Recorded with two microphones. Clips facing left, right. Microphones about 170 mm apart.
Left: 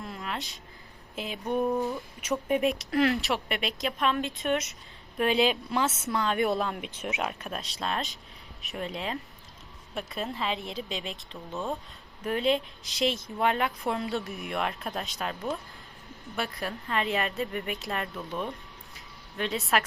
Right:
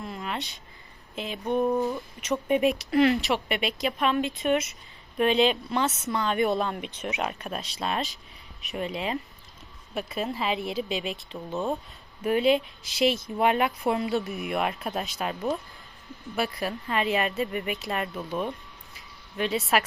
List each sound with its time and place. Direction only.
0.0 s a sound: centre (ahead or behind)
1.1 s speech: centre (ahead or behind)
11.5 s speech: 15° right (ahead or behind)
12.2 s speech: 5° right (ahead or behind)
16.4 s speech: 5° right (ahead or behind)